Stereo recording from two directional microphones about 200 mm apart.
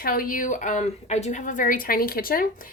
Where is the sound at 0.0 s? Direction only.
45° left (ahead or behind).